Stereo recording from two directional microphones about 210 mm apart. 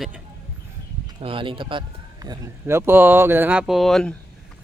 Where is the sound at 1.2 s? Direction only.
25° right (ahead or behind); by 4.1 s centre (ahead or behind).